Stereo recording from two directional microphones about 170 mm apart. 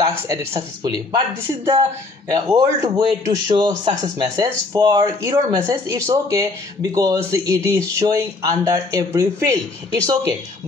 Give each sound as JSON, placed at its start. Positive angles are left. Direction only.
{"t": 0.8, "sound": "a man's voice", "side_deg": -25}